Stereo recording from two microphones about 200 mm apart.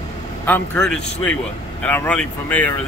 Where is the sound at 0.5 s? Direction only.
5° left (ahead or behind).